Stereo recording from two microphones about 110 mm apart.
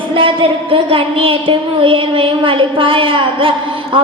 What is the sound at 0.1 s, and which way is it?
A woman's voice, 55° right (ahead or behind).